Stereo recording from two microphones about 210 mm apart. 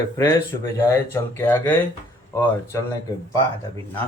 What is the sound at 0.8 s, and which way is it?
Speech, 15° left (ahead or behind).